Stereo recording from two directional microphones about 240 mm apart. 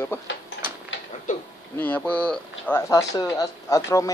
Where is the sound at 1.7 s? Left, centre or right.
Centre.